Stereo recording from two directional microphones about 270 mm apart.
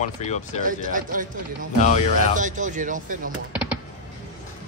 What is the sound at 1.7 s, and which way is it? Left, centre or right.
Speech, left.